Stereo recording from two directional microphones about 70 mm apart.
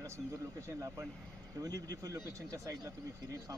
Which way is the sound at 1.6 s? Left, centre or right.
Right.